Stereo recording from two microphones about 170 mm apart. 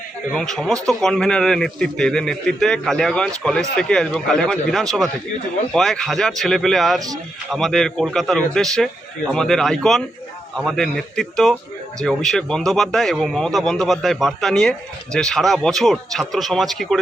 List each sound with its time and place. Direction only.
0.3 s a man's voice: 5° left (ahead or behind)